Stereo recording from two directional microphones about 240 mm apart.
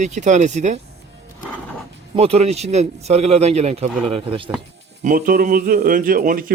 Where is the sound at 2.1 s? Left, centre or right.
Right.